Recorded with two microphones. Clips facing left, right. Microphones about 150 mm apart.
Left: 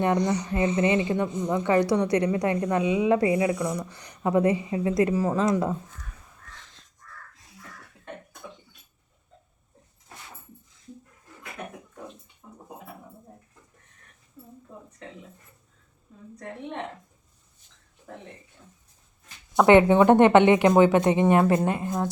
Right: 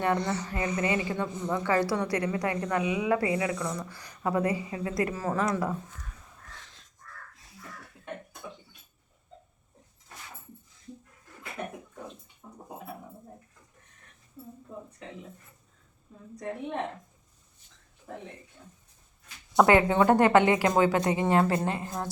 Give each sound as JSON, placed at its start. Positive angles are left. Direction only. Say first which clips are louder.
{"t": 0.0, "sound": "a woman's voice", "louder": "left 4 dB", "side_deg": 15}
{"t": 2.7, "sound": "a woman's voice", "louder": "left 4 dB", "side_deg": 30}
{"t": 12.4, "sound": "a sound", "louder": "left 1 dB", "side_deg": -10}
{"t": 19.6, "sound": "a woman's voice", "louder": "left 7 dB", "side_deg": 20}